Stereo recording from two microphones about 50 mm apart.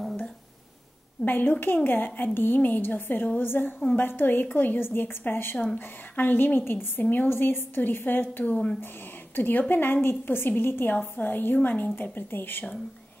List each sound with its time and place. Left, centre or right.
1.2 s a woman's voice: left
7.0 s a woman's voice: left
7.2 s a woman's voice: left
11.9 s a woman's voice: left